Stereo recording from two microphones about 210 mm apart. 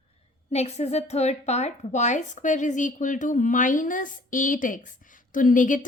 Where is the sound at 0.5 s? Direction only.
30° left (ahead or behind).